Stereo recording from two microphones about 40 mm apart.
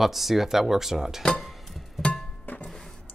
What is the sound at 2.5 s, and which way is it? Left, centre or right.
Music, left.